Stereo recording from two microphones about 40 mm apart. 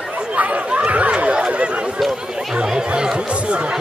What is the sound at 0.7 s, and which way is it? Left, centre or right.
Chatter, right.